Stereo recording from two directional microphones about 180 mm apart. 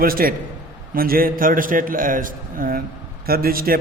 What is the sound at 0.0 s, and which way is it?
A man's voice, 55° right (ahead or behind).